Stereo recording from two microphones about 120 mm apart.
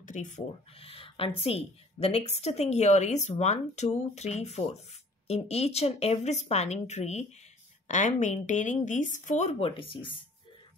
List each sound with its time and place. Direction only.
0.0 s speech: 90° left
0.7 s a woman's voice: 50° left (ahead or behind); by 7.2 s 65° left (ahead or behind)
7.9 s speech: 90° left
9.6 s speech: 45° left (ahead or behind)